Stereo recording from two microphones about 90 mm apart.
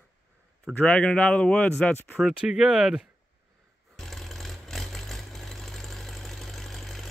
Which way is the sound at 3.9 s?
5° left (ahead or behind).